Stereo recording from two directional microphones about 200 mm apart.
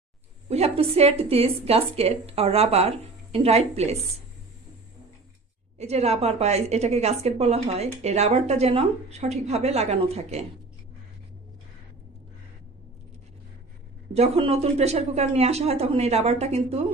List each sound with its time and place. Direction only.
0.4 s a woman's voice: 30° right (ahead or behind)
5.7 s a woman's voice: 30° right (ahead or behind)
14.1 s a woman's voice: 30° right (ahead or behind)